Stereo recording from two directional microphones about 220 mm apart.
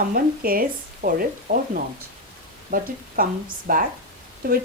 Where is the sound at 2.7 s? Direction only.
40° right (ahead or behind).